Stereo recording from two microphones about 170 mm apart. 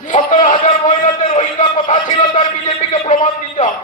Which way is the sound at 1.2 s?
45° left (ahead or behind).